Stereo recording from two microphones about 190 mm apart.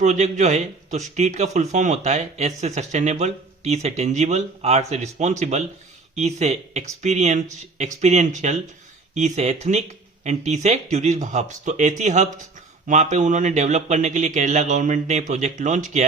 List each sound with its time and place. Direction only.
0.0 s a man's voice: 40° right (ahead or behind)